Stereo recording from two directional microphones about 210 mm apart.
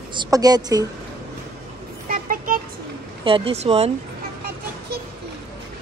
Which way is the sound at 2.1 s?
40° right (ahead or behind).